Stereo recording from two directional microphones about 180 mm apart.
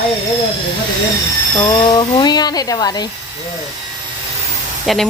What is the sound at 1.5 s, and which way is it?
Speech, 20° left (ahead or behind).